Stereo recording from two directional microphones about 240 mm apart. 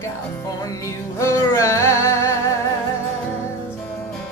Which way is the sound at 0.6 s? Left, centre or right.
Centre.